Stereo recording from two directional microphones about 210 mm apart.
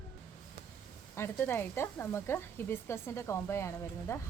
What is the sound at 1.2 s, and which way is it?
Speech, 10° left (ahead or behind).